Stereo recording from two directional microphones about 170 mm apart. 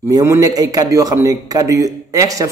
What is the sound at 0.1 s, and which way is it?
Speech, 20° right (ahead or behind).